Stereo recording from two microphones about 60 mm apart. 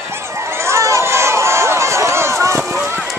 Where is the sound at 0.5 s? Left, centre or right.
Right.